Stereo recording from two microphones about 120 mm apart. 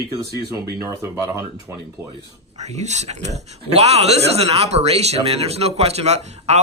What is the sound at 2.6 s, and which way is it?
Speech, 70° right (ahead or behind).